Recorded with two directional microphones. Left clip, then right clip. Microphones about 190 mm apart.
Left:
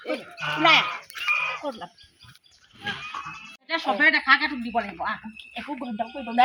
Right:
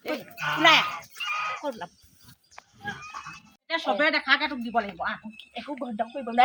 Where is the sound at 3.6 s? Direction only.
15° right (ahead or behind).